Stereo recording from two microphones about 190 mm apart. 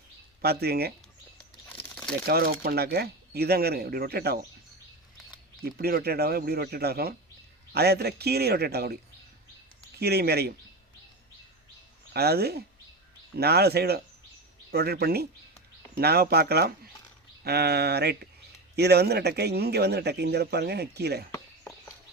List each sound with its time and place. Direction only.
0.4 s speech: 55° right (ahead or behind)
1.6 s crumpling: 10° left (ahead or behind)
2.2 s speech: 50° right (ahead or behind)
5.6 s speech: 55° right (ahead or behind)
10.0 s speech: 55° right (ahead or behind)
12.1 s speech: 55° right (ahead or behind)